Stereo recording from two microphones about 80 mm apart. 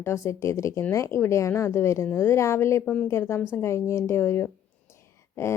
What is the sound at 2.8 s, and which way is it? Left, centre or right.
Speech, centre.